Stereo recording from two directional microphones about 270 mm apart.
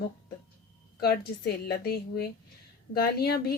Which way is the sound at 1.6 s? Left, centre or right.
Left.